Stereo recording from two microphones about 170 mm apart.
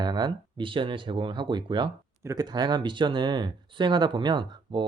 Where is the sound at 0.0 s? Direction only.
25° right (ahead or behind).